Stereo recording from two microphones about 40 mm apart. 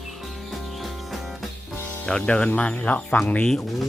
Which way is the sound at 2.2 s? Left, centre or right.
Left.